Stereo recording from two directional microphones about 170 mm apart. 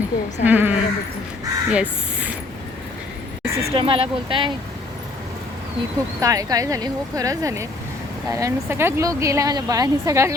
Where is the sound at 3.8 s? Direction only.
35° right (ahead or behind).